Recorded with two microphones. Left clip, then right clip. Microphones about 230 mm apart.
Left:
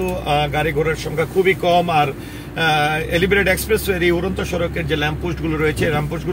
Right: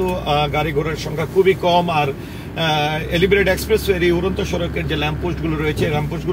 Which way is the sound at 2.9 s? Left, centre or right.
Left.